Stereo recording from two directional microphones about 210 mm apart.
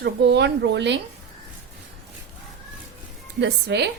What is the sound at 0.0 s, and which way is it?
Speech, 55° right (ahead or behind).